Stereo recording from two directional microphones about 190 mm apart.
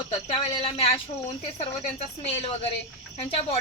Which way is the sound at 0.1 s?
25° left (ahead or behind).